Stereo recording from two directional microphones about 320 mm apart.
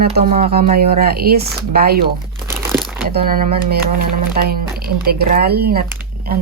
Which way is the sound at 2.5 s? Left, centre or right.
Centre.